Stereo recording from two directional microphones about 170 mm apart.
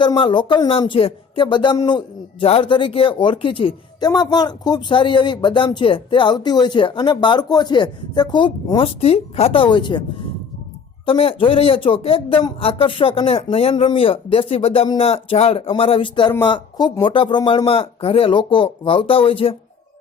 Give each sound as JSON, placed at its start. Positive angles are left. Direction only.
{"t": 0.0, "sound": "speech", "side_deg": 30}
{"t": 11.0, "sound": "speech", "side_deg": 30}